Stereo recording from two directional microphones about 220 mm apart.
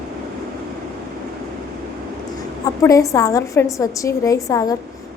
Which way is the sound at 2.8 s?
15° left (ahead or behind).